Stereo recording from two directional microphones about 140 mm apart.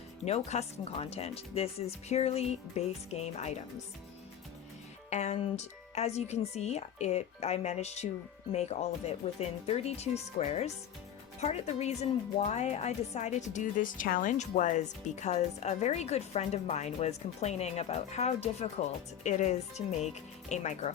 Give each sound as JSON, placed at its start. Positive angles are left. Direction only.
{"t": 0.3, "sound": "speech", "side_deg": 50}
{"t": 5.1, "sound": "speech", "side_deg": 50}